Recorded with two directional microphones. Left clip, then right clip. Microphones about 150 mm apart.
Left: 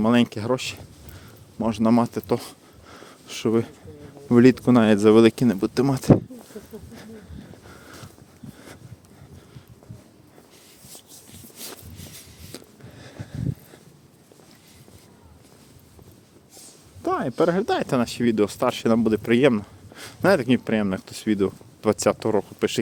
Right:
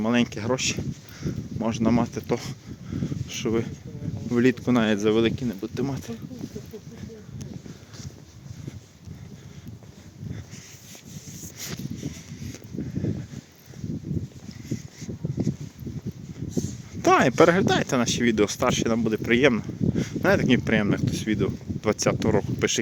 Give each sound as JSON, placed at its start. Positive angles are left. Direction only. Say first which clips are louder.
{"t": 0.0, "sound": "speech", "louder": "left 4 dB", "side_deg": 30}
{"t": 0.3, "sound": "speech", "louder": "even", "side_deg": 20}
{"t": 1.2, "sound": "a sound", "louder": "left 1 dB", "side_deg": 10}
{"t": 1.7, "sound": "speech", "louder": "left 4 dB", "side_deg": 30}
{"t": 2.9, "sound": "a sound", "louder": "right 4 dB", "side_deg": 35}
{"t": 4.3, "sound": "speech", "louder": "left 6 dB", "side_deg": 35}
{"t": 5.8, "sound": "speech", "louder": "left 5 dB", "side_deg": 50}
{"t": 13.0, "sound": "a sound", "louder": "right 9 dB", "side_deg": 40}
{"t": 17.0, "sound": "a sound", "louder": "right 5 dB", "side_deg": -15}
{"t": 17.5, "sound": "speech", "louder": "even", "side_deg": 15}
{"t": 21.0, "sound": "speech", "louder": "left 2 dB", "side_deg": 25}
{"t": 22.3, "sound": "speech", "louder": "left 1 dB", "side_deg": 15}